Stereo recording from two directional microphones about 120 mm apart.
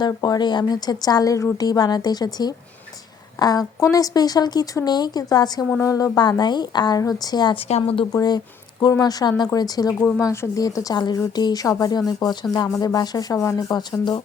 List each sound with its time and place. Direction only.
0.0 s speech: 35° left (ahead or behind)
7.7 s speech: 55° left (ahead or behind)
8.1 s speech: 30° left (ahead or behind)